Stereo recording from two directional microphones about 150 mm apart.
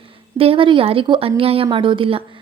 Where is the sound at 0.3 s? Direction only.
35° right (ahead or behind).